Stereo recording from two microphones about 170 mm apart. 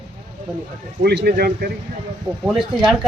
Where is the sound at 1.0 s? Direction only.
70° right (ahead or behind).